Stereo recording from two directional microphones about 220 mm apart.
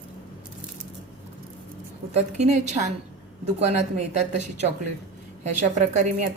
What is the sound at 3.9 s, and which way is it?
Speech, 30° right (ahead or behind).